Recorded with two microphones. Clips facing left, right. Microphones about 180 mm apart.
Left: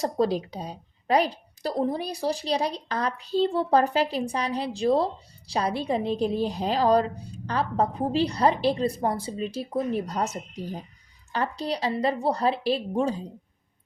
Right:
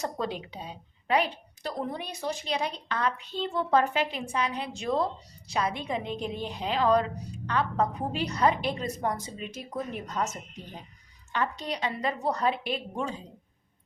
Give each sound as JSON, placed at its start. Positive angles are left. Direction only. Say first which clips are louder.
{"t": 0.0, "sound": "a woman's voice", "louder": "left 8 dB", "side_deg": 35}